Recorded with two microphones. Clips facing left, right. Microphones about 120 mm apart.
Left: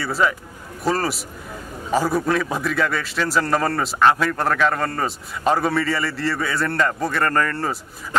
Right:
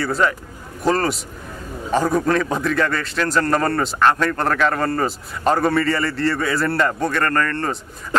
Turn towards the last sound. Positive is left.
turn(degrees=5)  # may be behind; listen again after turning